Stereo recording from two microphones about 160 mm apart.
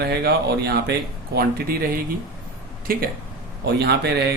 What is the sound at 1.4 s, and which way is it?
Speech, 70° right (ahead or behind).